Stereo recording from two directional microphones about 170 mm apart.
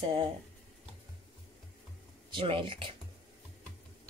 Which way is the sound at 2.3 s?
30° right (ahead or behind).